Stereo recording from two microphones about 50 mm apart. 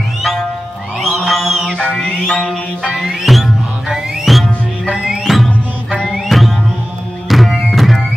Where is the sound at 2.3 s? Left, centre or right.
Centre.